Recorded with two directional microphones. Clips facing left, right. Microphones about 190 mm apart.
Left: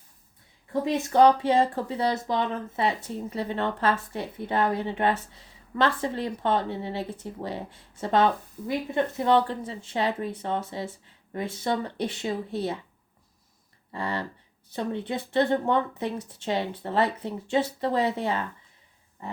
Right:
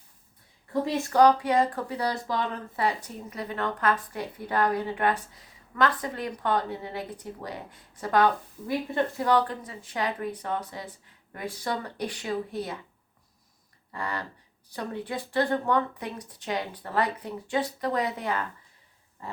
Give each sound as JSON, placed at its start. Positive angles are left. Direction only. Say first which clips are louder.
{"t": 0.7, "sound": "speech", "louder": "left 1 dB", "side_deg": 20}
{"t": 13.9, "sound": "speech", "louder": "left 3 dB", "side_deg": 25}